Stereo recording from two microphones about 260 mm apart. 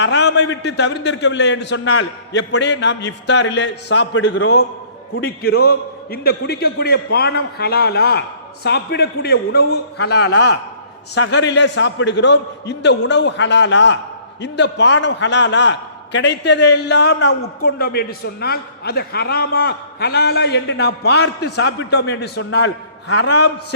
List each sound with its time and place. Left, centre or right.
0.0 s a man's voice: left